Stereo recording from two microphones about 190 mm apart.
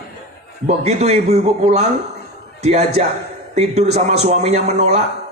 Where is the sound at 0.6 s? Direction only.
35° right (ahead or behind).